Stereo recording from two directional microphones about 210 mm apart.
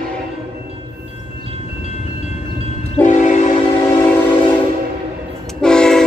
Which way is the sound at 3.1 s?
35° left (ahead or behind).